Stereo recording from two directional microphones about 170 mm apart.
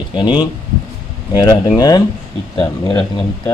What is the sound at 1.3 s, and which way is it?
Speech, 25° left (ahead or behind).